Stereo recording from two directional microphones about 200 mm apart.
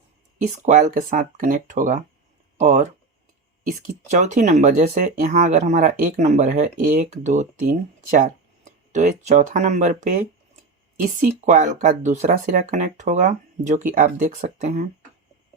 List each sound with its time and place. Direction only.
0.6 s speech: 40° right (ahead or behind)
11.2 s speech: 35° right (ahead or behind)